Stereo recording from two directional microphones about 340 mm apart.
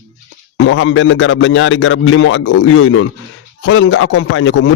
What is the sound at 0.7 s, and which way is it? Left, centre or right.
A man's voice, left.